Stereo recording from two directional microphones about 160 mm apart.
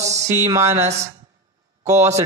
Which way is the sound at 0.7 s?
40° right (ahead or behind).